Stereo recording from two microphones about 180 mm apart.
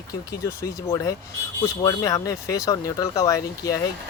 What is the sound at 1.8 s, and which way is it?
Speech, 20° left (ahead or behind).